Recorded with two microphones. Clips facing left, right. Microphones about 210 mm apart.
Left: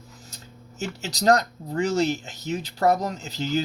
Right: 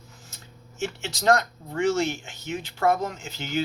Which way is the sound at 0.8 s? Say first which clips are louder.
Left 1 dB; 35° left (ahead or behind).